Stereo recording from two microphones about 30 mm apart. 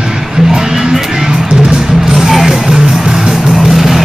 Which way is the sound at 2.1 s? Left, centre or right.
Centre.